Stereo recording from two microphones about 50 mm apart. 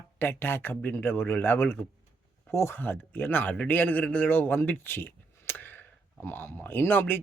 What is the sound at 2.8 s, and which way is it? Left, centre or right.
Speech, left.